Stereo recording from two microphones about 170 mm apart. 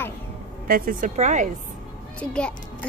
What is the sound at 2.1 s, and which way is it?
Speech, 5° left (ahead or behind).